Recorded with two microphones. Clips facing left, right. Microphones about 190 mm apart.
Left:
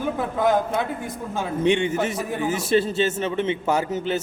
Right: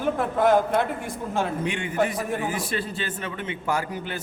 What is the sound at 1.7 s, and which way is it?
A man's voice, 25° left (ahead or behind).